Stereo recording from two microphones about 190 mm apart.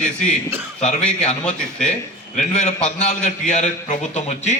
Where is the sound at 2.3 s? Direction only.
35° left (ahead or behind).